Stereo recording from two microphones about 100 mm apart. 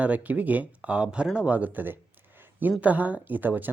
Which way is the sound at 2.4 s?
20° right (ahead or behind).